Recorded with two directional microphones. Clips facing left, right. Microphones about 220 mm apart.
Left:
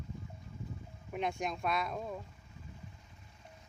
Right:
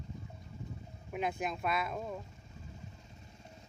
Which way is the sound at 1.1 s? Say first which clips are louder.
Even; 5° right (ahead or behind).